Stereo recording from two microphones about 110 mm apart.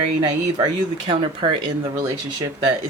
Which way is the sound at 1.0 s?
50° right (ahead or behind).